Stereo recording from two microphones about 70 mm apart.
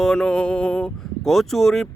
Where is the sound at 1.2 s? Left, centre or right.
Centre.